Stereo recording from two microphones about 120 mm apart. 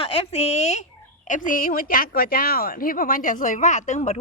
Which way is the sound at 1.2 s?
90° left.